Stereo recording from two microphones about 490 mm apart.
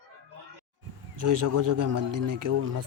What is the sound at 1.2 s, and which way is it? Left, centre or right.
A man's voice, right.